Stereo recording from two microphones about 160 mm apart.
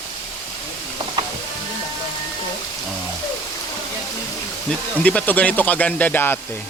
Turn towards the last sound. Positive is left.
turn(degrees=15)  # may be behind; listen again after turning